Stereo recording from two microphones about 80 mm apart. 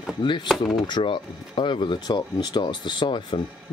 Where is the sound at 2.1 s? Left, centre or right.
Left.